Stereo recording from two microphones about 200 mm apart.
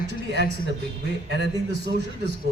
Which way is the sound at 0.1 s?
60° right (ahead or behind).